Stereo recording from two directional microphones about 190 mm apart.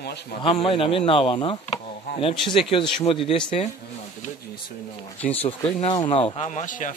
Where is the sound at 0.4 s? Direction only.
25° left (ahead or behind).